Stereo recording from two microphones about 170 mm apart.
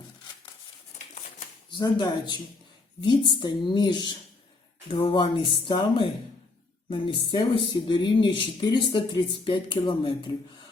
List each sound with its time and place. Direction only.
1.7 s speech: 25° left (ahead or behind)